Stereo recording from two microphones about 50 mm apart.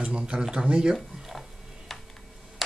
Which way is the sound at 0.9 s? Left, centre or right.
Centre.